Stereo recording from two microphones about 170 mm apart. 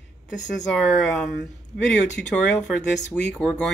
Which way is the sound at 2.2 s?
80° left.